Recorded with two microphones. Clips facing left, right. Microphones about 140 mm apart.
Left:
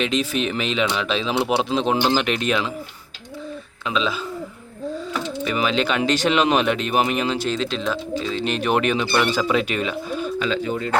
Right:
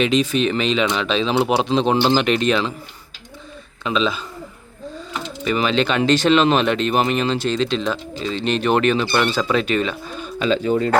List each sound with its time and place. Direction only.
0.0 s speech: centre (ahead or behind)
3.8 s speech: 5° left (ahead or behind)
5.5 s speech: 5° left (ahead or behind)
10.4 s speech: 30° right (ahead or behind)